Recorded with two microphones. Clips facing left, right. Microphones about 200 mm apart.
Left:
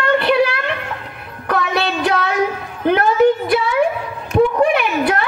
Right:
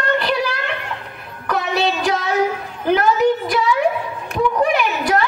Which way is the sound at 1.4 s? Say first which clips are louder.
Even; 60° left (ahead or behind).